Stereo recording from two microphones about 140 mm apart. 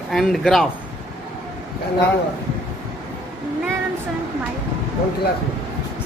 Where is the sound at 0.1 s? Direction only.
Centre (ahead or behind).